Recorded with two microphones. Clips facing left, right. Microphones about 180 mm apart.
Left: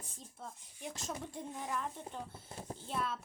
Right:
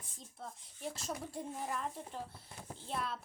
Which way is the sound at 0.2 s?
Centre (ahead or behind).